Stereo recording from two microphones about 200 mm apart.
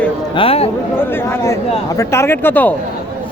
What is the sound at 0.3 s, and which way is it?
Speech, 30° left (ahead or behind).